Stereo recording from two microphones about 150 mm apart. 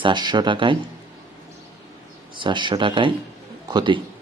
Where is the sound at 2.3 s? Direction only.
30° right (ahead or behind).